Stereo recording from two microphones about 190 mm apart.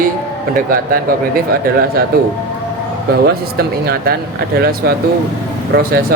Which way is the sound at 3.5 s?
55° right (ahead or behind).